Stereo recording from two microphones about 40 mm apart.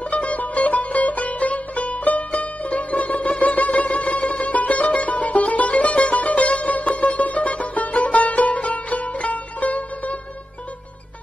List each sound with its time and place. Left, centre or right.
0.1 s music: left